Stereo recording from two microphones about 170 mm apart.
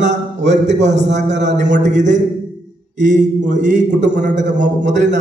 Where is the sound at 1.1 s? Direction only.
45° right (ahead or behind).